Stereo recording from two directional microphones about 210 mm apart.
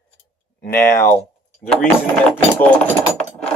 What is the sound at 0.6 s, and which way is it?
Speech, 10° left (ahead or behind).